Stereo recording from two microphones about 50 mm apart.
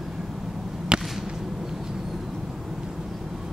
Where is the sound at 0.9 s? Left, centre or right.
Centre.